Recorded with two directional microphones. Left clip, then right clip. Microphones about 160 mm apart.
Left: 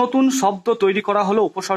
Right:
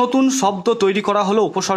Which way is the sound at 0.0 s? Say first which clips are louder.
Right 1 dB; 35° right (ahead or behind).